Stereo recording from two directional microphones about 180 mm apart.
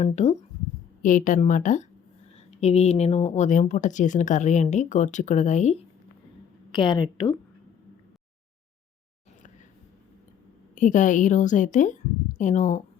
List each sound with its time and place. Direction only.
0.0 s a woman's voice: 40° left (ahead or behind)
6.7 s a woman's voice: 25° left (ahead or behind)
10.8 s a woman's voice: 45° left (ahead or behind)